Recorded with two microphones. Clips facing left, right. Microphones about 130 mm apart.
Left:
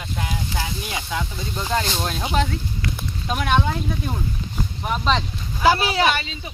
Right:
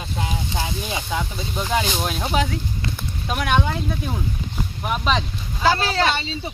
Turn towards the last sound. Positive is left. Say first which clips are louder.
# right 1 dB
turn(degrees=-30)  # may be behind; listen again after turning